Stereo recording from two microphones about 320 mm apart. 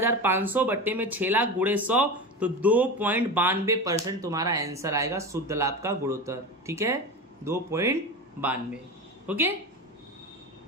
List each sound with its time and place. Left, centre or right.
0.0 s speech: centre